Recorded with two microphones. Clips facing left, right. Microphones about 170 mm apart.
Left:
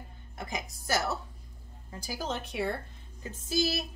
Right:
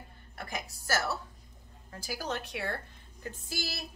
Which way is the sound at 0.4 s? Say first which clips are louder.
Left 2 dB; 20° left (ahead or behind).